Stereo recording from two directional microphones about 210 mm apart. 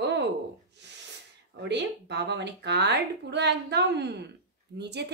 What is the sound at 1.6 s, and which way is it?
Speech, 55° right (ahead or behind).